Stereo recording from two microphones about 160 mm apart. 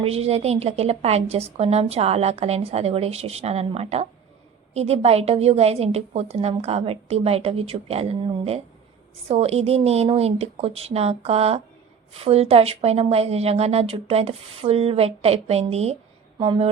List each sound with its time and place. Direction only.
0.0 s a woman's voice: 40° right (ahead or behind)